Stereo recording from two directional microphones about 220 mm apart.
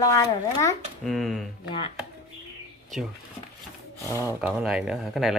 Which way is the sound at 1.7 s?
25° left (ahead or behind).